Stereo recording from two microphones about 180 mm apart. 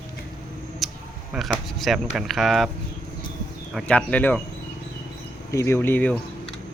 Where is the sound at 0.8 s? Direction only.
Centre (ahead or behind).